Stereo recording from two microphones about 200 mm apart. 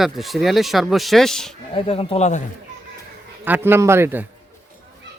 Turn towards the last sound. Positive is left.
turn(degrees=-10)  # may be behind; listen again after turning